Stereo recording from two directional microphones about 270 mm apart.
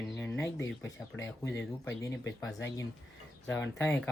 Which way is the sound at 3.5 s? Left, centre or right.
Centre.